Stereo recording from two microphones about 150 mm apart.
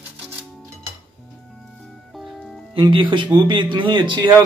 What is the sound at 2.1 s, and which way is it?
Music, centre (ahead or behind).